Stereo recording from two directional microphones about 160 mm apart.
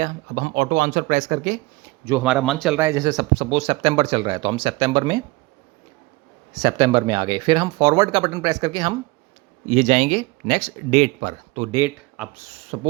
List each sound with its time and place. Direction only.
0.0 s speech: 60° right (ahead or behind)
2.0 s speech: 10° right (ahead or behind)
2.7 s speech: 15° right (ahead or behind)
6.5 s speech: 25° right (ahead or behind)
9.6 s speech: 45° right (ahead or behind)
11.7 s speech: 15° right (ahead or behind)
12.1 s speech: 5° right (ahead or behind)
12.7 s speech: 45° right (ahead or behind)